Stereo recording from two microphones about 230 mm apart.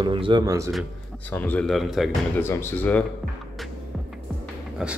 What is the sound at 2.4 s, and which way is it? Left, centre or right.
Speech, centre.